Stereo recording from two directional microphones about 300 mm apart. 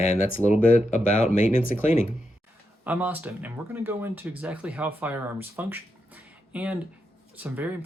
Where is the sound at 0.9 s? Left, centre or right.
Left.